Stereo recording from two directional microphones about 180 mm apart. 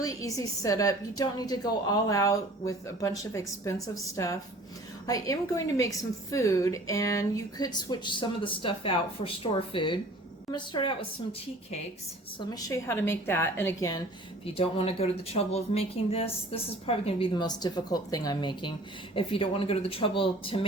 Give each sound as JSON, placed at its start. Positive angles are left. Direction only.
{"t": 0.0, "sound": "a woman's voice", "side_deg": 20}
{"t": 14.4, "sound": "speech", "side_deg": 30}